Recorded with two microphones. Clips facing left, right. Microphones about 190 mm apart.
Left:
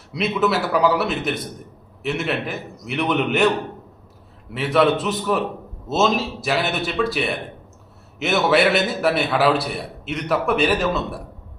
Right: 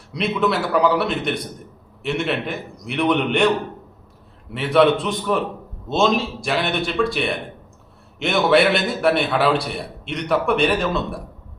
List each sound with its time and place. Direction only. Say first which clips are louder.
0.1 s a man's voice: even; 5° left (ahead or behind)
4.5 s a man's voice: right 2 dB; centre (ahead or behind)